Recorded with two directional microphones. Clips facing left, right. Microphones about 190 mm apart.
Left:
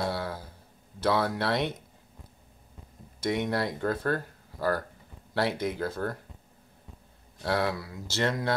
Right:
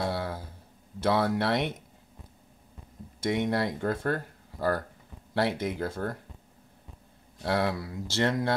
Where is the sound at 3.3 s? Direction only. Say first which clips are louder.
Right 1 dB; 20° right (ahead or behind).